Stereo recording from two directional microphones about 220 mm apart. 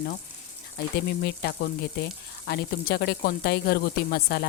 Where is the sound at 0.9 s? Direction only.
45° left (ahead or behind).